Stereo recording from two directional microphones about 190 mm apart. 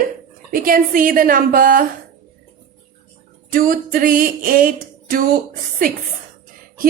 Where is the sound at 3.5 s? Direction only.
45° right (ahead or behind).